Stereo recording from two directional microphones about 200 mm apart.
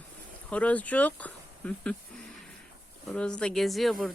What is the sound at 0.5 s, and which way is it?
Speech, 5° left (ahead or behind).